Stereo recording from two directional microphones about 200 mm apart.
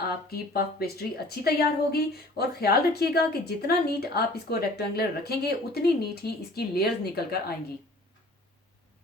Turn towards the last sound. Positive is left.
turn(degrees=50)  # may be behind; listen again after turning